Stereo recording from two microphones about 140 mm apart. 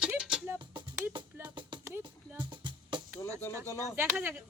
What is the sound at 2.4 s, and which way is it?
Music, 35° right (ahead or behind).